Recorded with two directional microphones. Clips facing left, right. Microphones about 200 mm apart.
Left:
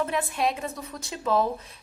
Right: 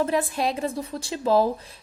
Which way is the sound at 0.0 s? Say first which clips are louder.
Right 3 dB; 35° right (ahead or behind).